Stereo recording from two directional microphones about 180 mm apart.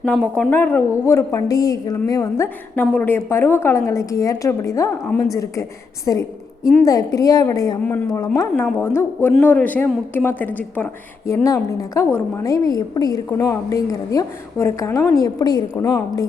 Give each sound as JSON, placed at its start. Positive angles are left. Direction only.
{"t": 0.0, "sound": "a woman's voice", "side_deg": 5}